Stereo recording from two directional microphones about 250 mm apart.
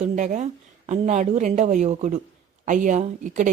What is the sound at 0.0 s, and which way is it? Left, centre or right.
Speech, right.